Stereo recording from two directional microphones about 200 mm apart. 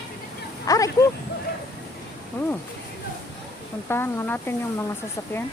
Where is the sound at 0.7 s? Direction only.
15° left (ahead or behind).